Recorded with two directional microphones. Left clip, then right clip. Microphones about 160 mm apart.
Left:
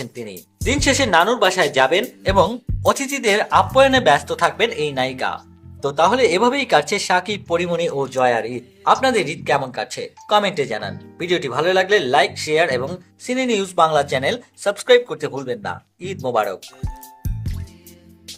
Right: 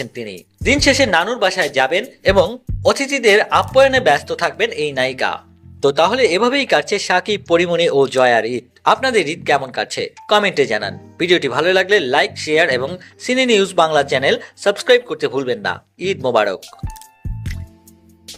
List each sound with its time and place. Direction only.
0.0 s speech: 10° right (ahead or behind)
16.6 s speech: centre (ahead or behind)